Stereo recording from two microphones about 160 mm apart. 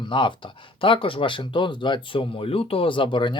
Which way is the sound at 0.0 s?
30° left (ahead or behind).